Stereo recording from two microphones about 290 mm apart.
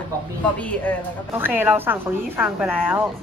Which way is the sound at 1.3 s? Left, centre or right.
Centre.